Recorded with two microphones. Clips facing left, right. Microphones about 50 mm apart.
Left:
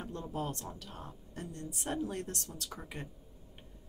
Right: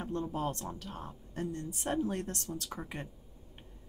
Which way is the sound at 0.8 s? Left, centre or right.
Centre.